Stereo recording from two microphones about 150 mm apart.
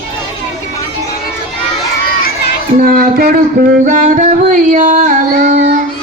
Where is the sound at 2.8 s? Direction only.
75° right (ahead or behind).